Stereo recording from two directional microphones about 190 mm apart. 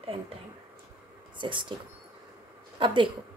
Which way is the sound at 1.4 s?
25° right (ahead or behind).